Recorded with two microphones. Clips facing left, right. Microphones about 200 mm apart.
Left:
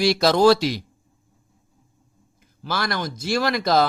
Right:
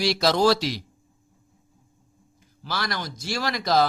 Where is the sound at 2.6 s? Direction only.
50° left (ahead or behind).